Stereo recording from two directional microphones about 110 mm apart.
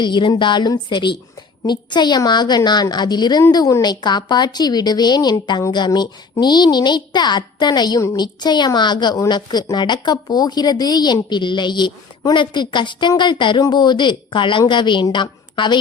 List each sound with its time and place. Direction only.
0.0 s a woman's voice: 45° left (ahead or behind)